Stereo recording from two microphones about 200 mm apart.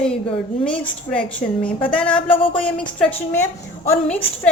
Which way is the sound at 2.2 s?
25° left (ahead or behind).